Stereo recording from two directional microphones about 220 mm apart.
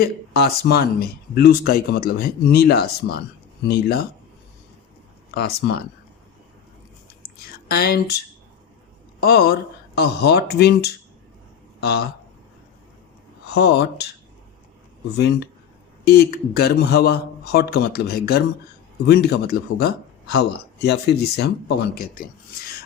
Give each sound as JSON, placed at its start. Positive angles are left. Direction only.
{"t": 0.0, "sound": "a man's voice", "side_deg": 45}
{"t": 5.3, "sound": "a man's voice", "side_deg": 45}
{"t": 7.7, "sound": "a man's voice", "side_deg": 45}
{"t": 9.2, "sound": "a man's voice", "side_deg": 45}
{"t": 13.5, "sound": "a man's voice", "side_deg": 50}
{"t": 16.0, "sound": "a man's voice", "side_deg": 45}